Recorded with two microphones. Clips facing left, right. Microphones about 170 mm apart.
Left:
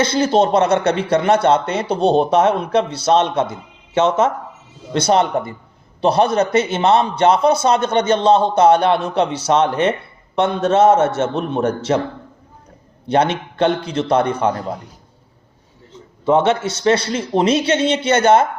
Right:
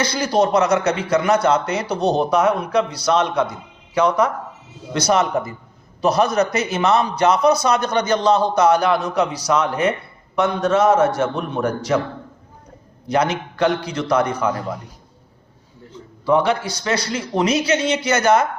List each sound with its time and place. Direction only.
0.0 s a man's voice: 25° left (ahead or behind)
13.1 s a man's voice: 25° left (ahead or behind)
16.2 s a man's voice: 25° left (ahead or behind)